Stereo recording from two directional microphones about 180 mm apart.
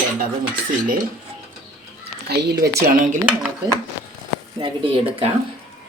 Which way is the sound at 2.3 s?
65° right (ahead or behind).